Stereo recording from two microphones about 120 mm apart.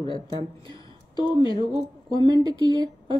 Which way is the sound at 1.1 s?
40° left (ahead or behind).